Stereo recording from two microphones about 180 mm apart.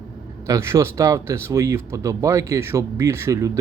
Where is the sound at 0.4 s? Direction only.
15° right (ahead or behind).